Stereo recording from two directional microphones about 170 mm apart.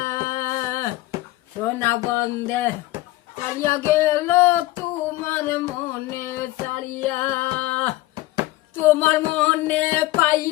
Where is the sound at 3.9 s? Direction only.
15° left (ahead or behind).